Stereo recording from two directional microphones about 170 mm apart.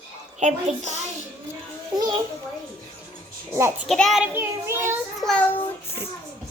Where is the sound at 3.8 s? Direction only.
Centre (ahead or behind).